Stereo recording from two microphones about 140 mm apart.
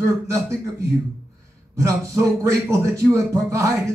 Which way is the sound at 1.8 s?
20° right (ahead or behind).